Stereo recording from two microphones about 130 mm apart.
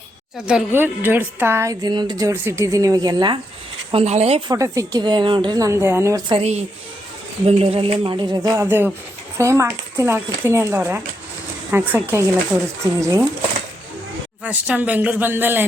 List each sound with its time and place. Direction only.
0.4 s a woman's voice: 10° right (ahead or behind)
1.9 s speech: 35° right (ahead or behind)
3.9 s speech: 55° right (ahead or behind)
4.4 s speech: 25° right (ahead or behind)
5.5 s speech: 25° right (ahead or behind)
6.4 s a woman's voice: 55° right (ahead or behind); by 13.2 s 25° right (ahead or behind)
14.4 s a woman's voice: 10° right (ahead or behind)